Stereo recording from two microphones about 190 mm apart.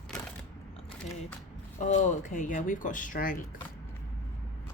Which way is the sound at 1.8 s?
40° left (ahead or behind).